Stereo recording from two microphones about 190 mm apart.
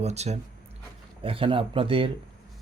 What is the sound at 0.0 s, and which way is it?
Speech, 35° right (ahead or behind).